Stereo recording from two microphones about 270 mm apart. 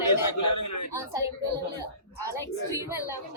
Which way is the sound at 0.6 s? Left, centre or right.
Left.